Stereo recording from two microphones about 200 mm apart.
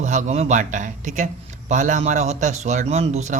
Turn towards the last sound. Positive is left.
turn(degrees=-35)  # may be behind; listen again after turning